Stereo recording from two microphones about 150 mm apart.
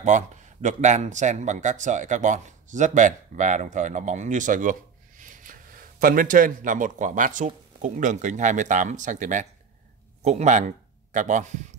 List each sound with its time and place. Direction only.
0.0 s speech: 55° right (ahead or behind)